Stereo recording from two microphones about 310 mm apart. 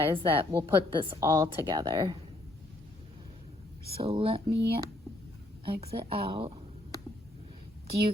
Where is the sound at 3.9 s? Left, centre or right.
Centre.